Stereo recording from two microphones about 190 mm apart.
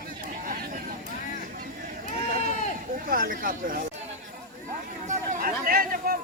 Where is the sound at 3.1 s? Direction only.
45° right (ahead or behind).